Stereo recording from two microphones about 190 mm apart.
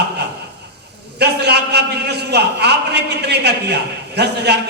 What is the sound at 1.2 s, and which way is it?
A man's voice, 60° right (ahead or behind).